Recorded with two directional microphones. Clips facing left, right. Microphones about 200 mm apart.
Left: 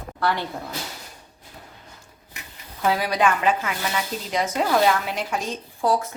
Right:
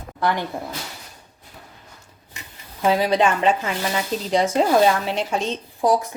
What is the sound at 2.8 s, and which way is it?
Speech, 25° right (ahead or behind).